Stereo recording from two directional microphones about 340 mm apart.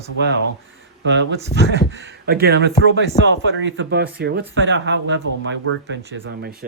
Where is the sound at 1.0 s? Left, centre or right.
Right.